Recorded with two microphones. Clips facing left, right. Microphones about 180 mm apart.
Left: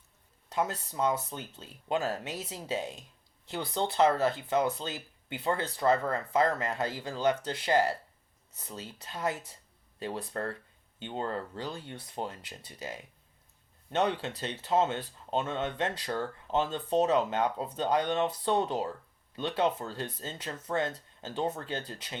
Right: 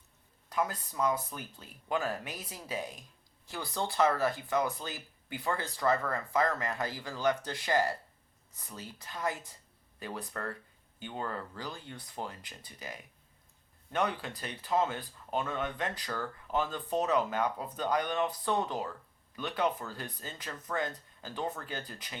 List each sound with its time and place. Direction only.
0.5 s speech: 25° left (ahead or behind)